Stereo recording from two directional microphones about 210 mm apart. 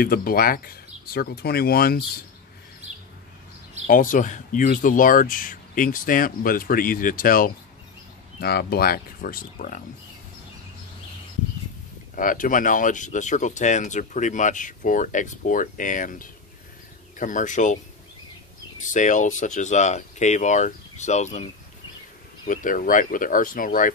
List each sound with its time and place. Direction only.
0.0 s speech: 45° left (ahead or behind)
3.8 s speech: 40° left (ahead or behind)
12.2 s speech: 40° left (ahead or behind)
18.9 s speech: 35° left (ahead or behind)
22.5 s speech: 40° left (ahead or behind)